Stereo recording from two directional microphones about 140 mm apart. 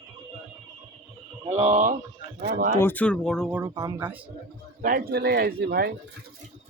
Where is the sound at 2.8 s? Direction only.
10° left (ahead or behind).